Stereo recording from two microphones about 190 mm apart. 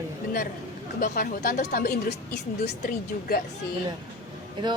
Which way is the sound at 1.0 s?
45° left (ahead or behind).